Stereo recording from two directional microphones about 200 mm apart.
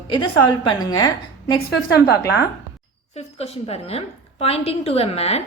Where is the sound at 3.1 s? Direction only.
30° left (ahead or behind).